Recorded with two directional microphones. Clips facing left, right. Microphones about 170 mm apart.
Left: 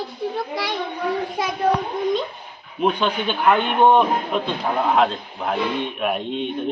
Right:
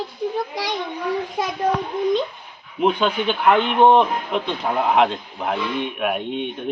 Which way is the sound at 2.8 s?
15° right (ahead or behind).